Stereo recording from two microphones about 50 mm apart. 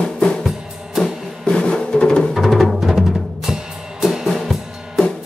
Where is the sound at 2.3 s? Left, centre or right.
Centre.